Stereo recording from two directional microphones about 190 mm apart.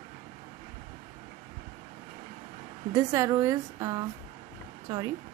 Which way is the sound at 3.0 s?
15° right (ahead or behind).